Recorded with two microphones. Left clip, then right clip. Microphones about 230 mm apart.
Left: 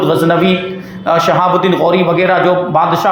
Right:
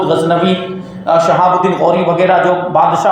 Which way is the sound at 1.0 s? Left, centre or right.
Left.